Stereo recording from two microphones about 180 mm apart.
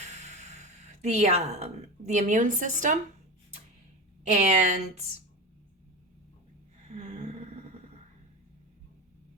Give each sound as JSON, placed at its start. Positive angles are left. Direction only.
{"t": 0.6, "sound": "a woman's voice", "side_deg": -40}
{"t": 4.2, "sound": "speech", "side_deg": -40}
{"t": 6.8, "sound": "a sound", "side_deg": -40}